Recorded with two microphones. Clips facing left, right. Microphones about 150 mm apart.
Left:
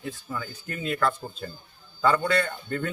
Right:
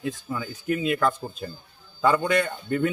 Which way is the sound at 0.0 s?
10° right (ahead or behind).